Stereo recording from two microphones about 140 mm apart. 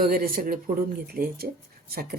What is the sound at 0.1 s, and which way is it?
Speech, 90° right.